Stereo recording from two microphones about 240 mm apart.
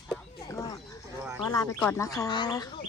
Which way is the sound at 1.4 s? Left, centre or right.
Centre.